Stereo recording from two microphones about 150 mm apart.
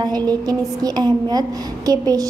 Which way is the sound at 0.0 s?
25° right (ahead or behind).